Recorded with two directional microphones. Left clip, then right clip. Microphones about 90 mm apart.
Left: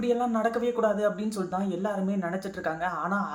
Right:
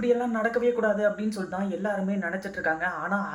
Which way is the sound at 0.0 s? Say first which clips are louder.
Right 1 dB; 20° left (ahead or behind).